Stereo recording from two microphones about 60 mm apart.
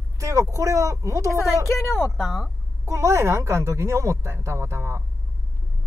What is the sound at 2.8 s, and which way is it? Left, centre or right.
Speech, right.